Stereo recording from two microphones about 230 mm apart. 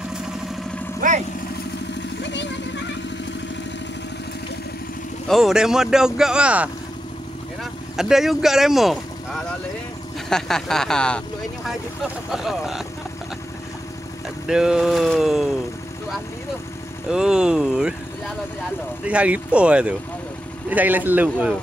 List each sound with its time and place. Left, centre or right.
1.0 s vehicle: right
2.2 s vehicle: left
5.3 s speech: centre
7.9 s speech: centre
14.5 s speech: centre
17.1 s speech: centre